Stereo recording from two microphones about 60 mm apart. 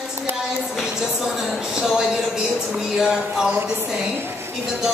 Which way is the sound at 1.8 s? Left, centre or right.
Centre.